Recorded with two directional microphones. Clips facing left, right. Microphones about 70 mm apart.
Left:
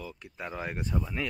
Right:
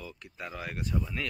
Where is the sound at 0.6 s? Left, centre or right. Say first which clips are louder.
Left 1 dB; left.